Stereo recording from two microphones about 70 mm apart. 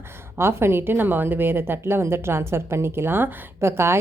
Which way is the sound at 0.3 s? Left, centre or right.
Right.